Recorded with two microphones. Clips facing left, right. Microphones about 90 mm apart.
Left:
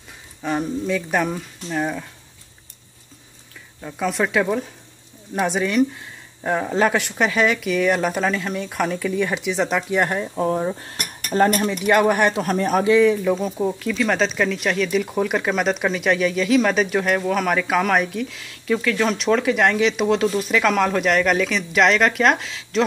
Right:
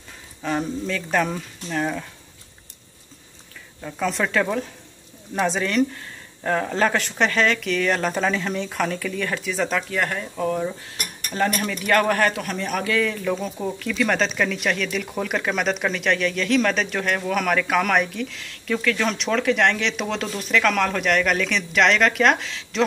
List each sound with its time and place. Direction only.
0.4 s speech: 10° left (ahead or behind)
3.8 s a man's voice: 5° left (ahead or behind); by 11.6 s 35° left (ahead or behind)
11.6 s speech: 20° left (ahead or behind)
12.4 s a man's voice: 40° left (ahead or behind)
13.0 s speech: 10° left (ahead or behind)